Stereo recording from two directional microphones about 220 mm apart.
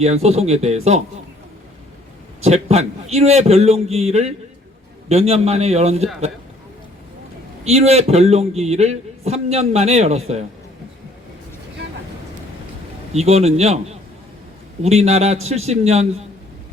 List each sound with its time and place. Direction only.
0.0 s a man's voice: 30° right (ahead or behind)
2.4 s a man's voice: 30° right (ahead or behind)
7.6 s a man's voice: 30° right (ahead or behind)
13.1 s a man's voice: 30° right (ahead or behind)
14.8 s a man's voice: 30° right (ahead or behind)